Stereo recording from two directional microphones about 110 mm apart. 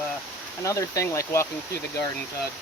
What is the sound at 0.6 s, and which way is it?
Speech, 30° left (ahead or behind).